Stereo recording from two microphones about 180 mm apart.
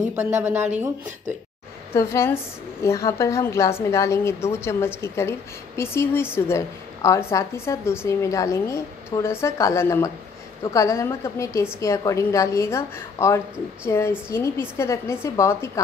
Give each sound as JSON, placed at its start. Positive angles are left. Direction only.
{"t": 0.4, "sound": "speech", "side_deg": -10}
{"t": 2.0, "sound": "a woman's voice", "side_deg": 15}